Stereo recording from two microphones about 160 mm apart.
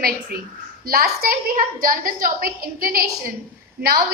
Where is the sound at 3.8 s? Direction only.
75° right (ahead or behind).